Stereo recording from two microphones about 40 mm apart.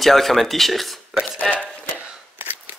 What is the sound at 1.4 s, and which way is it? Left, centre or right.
Speech, left.